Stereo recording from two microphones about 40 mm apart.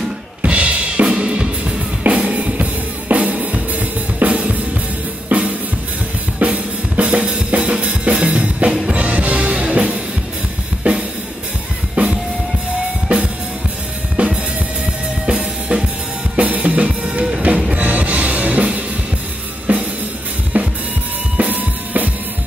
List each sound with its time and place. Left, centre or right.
0.4 s drum kit: right
3.3 s music: right
4.2 s drum kit: right
5.3 s music: right
6.4 s drum: right
8.8 s music: right
10.8 s drum: right
11.9 s drum kit: right
14.1 s drum kit: right
16.3 s drum kit: right
17.6 s music: right
20.5 s drum kit: right